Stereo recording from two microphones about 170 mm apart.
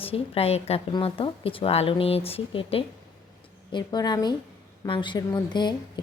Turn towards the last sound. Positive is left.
turn(degrees=25)  # may be behind; listen again after turning